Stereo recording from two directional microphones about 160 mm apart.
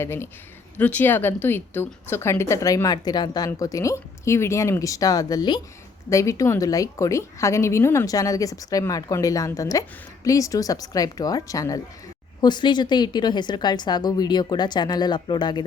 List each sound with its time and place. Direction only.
0.0 s speech: 15° left (ahead or behind)